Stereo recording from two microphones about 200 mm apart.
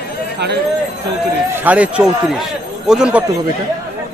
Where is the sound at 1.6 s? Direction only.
5° right (ahead or behind).